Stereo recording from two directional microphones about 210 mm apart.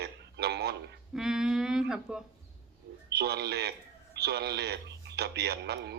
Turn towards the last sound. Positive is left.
turn(degrees=-50)  # may be behind; listen again after turning